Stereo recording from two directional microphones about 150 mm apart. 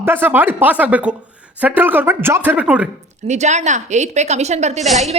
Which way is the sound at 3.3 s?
50° right (ahead or behind).